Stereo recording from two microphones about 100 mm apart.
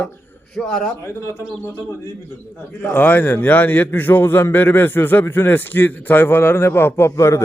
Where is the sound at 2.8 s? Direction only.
20° left (ahead or behind).